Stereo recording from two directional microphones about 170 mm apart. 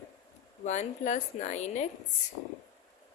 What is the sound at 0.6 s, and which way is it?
A woman's voice, 45° left (ahead or behind).